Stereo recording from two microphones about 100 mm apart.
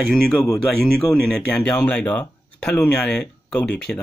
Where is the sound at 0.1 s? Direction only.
10° left (ahead or behind).